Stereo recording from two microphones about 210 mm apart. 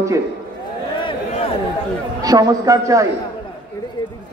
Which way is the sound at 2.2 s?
15° right (ahead or behind).